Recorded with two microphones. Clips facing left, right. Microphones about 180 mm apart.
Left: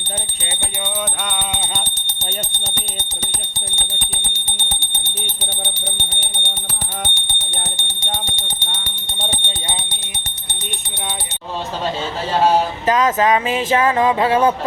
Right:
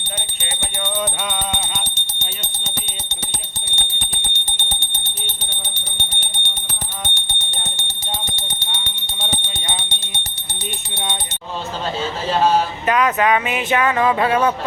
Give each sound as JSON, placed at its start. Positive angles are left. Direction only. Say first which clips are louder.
{"t": 9.5, "sound": "bell", "louder": "left 1 dB", "side_deg": -20}
{"t": 12.9, "sound": "music", "louder": "left 1 dB", "side_deg": 25}